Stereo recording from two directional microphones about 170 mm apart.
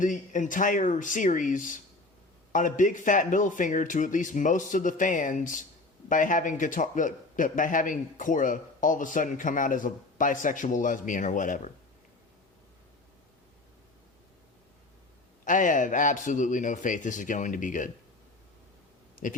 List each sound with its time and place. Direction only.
0.0 s a man's voice: 50° left (ahead or behind)
15.4 s a man's voice: 50° left (ahead or behind)
19.2 s a sound: 50° left (ahead or behind)